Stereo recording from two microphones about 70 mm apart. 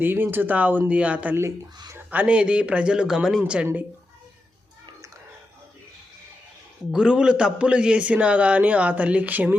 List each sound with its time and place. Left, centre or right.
0.0 s a man's voice: right
6.9 s a man's voice: centre